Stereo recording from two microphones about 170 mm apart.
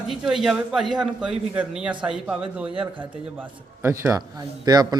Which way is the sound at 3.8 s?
15° right (ahead or behind).